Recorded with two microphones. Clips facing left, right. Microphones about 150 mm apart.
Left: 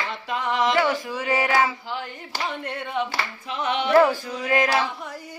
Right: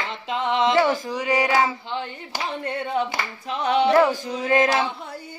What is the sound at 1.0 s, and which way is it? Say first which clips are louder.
Speech: right 2 dB; 15° right (ahead or behind).